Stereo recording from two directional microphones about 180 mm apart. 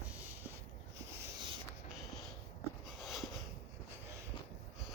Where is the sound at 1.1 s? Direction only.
65° right (ahead or behind).